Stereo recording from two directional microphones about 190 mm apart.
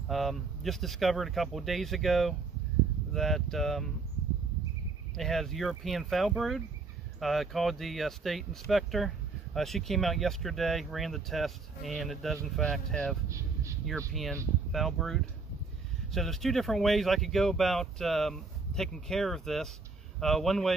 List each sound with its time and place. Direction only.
0.1 s speech: centre (ahead or behind)
5.1 s speech: centre (ahead or behind)
13.3 s a sound: 15° right (ahead or behind)
13.8 s speech: centre (ahead or behind)